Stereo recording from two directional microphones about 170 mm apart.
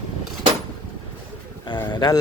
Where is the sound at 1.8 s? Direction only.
25° left (ahead or behind).